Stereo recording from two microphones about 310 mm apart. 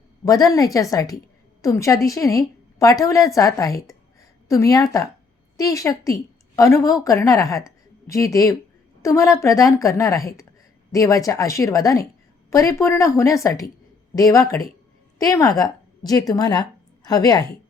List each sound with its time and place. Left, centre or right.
0.3 s a woman's voice: centre